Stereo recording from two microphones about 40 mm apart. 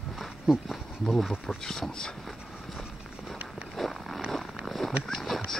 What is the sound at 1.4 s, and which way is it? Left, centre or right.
Speech, centre.